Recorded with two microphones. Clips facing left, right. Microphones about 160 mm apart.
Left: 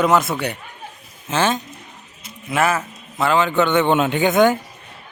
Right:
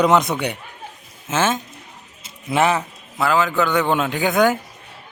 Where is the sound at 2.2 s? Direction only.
25° right (ahead or behind).